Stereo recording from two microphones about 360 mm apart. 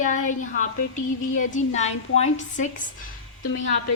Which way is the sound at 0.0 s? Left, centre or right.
Left.